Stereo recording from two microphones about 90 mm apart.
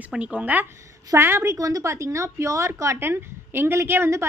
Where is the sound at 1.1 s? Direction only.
30° right (ahead or behind).